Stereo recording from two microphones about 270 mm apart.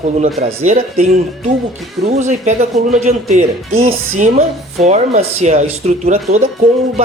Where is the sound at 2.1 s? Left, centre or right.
Right.